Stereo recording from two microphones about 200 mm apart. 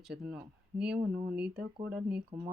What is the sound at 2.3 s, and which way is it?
Speech, 25° right (ahead or behind).